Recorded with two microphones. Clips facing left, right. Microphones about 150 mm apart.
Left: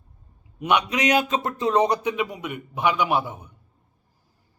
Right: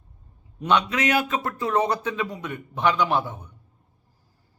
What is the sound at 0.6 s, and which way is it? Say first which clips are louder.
A man's voice: even; 15° left (ahead or behind).